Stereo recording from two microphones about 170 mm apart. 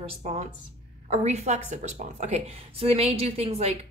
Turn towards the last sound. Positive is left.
turn(degrees=-35)  # may be behind; listen again after turning